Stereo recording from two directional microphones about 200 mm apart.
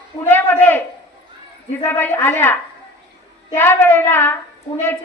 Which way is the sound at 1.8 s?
10° left (ahead or behind).